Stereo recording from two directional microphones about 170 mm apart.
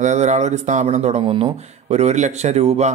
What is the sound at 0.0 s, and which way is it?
Speech, 45° right (ahead or behind).